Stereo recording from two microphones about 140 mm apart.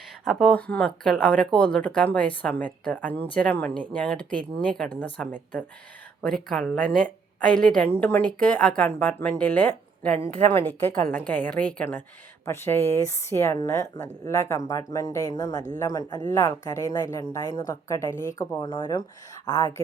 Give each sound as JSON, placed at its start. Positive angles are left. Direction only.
{"t": 0.3, "sound": "speech", "side_deg": 5}
{"t": 10.2, "sound": "a woman's voice", "side_deg": -45}
{"t": 10.5, "sound": "a woman's voice", "side_deg": 15}